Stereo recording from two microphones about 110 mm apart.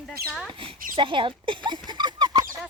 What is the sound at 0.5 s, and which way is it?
Speech, 55° right (ahead or behind).